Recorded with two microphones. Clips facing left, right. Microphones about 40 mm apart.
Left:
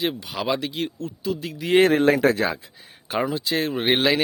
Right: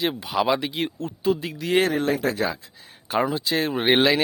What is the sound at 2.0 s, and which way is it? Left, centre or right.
Speech, left.